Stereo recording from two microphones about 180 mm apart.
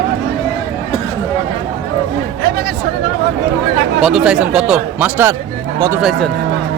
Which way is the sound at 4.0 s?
Centre (ahead or behind).